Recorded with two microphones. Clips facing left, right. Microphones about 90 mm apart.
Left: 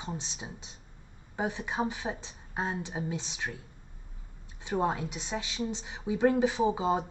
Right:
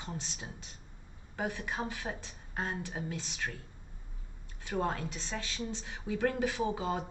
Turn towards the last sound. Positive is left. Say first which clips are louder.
# left 6 dB
turn(degrees=20)  # may be behind; listen again after turning